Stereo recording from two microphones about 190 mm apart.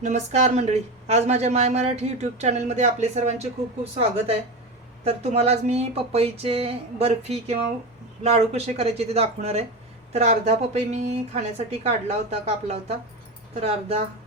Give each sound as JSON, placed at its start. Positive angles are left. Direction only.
{"t": 0.0, "sound": "speech", "side_deg": -35}
{"t": 5.0, "sound": "speech", "side_deg": -35}